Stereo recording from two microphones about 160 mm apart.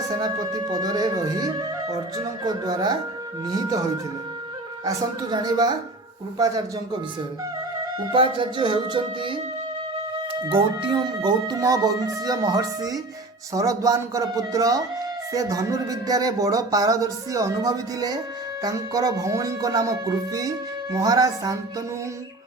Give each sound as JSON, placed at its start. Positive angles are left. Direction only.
{"t": 0.0, "sound": "speech", "side_deg": -25}
{"t": 8.1, "sound": "speech", "side_deg": -35}
{"t": 10.4, "sound": "speech", "side_deg": -30}